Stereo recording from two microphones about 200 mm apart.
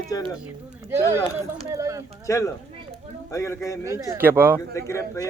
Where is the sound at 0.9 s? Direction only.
15° right (ahead or behind).